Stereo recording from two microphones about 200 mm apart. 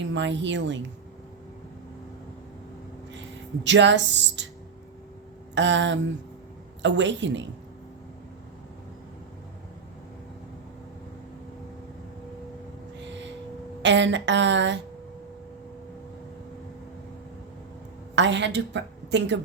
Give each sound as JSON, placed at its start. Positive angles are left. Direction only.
{"t": 0.0, "sound": "a woman's voice", "side_deg": -65}
{"t": 3.1, "sound": "speech", "side_deg": -65}
{"t": 5.5, "sound": "a woman's voice", "side_deg": -65}
{"t": 13.8, "sound": "a woman's voice", "side_deg": -65}
{"t": 18.1, "sound": "a woman's voice", "side_deg": -65}